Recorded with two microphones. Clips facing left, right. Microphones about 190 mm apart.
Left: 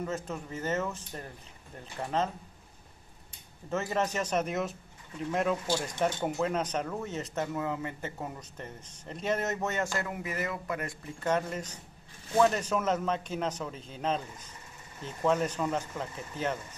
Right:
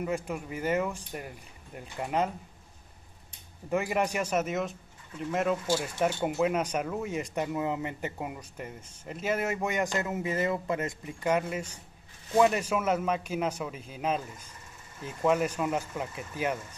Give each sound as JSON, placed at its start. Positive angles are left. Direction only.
{"t": 0.0, "sound": "speech", "side_deg": -10}
{"t": 3.7, "sound": "speech", "side_deg": -15}